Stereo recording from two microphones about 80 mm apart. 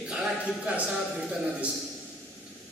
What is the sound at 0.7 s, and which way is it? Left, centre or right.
Speech, centre.